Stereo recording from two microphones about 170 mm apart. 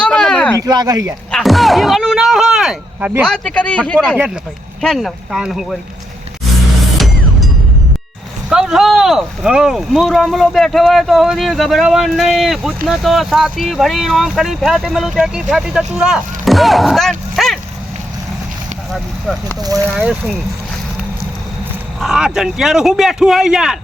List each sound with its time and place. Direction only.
0.0 s a sound: 5° left (ahead or behind)
0.6 s speech: 20° right (ahead or behind)
1.3 s a sound: centre (ahead or behind)
3.2 s speech: 5° left (ahead or behind)
6.8 s music: centre (ahead or behind)
8.4 s speech: 5° right (ahead or behind)
18.9 s a sound: centre (ahead or behind)
20.0 s speech: centre (ahead or behind)
22.0 s speech: 5° right (ahead or behind)